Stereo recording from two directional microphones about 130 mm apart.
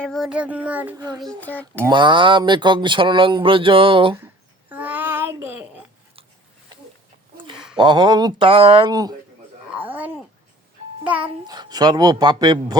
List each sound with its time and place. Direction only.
0.0 s child singing: centre (ahead or behind)
0.9 s speech: 35° right (ahead or behind)
1.4 s speech: 10° left (ahead or behind)
1.9 s speech: 35° right (ahead or behind)
4.7 s child singing: 15° right (ahead or behind)
7.3 s a sound: 40° right (ahead or behind)
7.8 s speech: 35° right (ahead or behind)
8.4 s speech: 45° right (ahead or behind)
8.9 s speech: 30° right (ahead or behind)
9.7 s a sound: 10° right (ahead or behind)
11.4 s speech: 30° right (ahead or behind)